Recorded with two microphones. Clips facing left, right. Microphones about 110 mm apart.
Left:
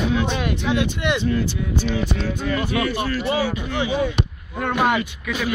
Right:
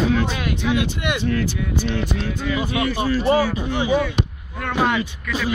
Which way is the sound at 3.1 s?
40° right (ahead or behind).